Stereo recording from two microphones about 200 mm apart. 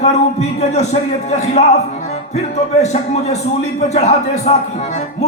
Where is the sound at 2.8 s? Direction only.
35° left (ahead or behind).